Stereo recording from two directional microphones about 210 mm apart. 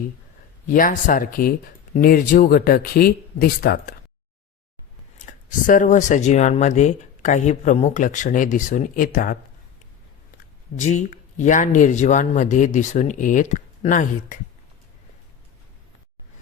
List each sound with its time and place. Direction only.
0.7 s speech: 40° left (ahead or behind)
5.1 s speech: 40° left (ahead or behind)
10.8 s speech: 35° left (ahead or behind)